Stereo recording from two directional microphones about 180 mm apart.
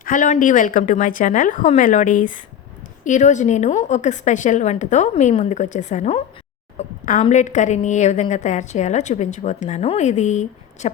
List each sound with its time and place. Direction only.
0.0 s a woman's voice: 45° left (ahead or behind)